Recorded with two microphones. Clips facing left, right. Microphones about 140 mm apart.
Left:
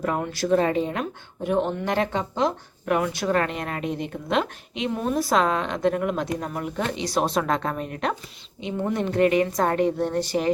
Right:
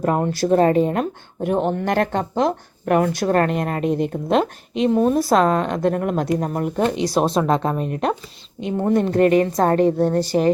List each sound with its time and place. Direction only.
0.0 s a woman's voice: 40° right (ahead or behind)
7.2 s a woman's voice: 30° right (ahead or behind)
8.8 s a woman's voice: 40° right (ahead or behind)